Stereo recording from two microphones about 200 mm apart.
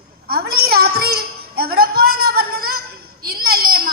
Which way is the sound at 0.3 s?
50° right (ahead or behind).